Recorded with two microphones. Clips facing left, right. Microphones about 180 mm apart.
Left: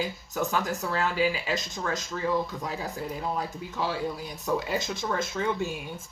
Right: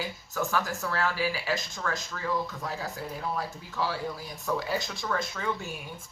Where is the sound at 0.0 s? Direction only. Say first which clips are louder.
Left 3 dB; 20° left (ahead or behind).